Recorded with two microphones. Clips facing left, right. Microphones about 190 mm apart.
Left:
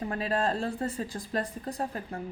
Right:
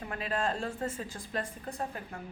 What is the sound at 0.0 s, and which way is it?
Speech, 35° left (ahead or behind).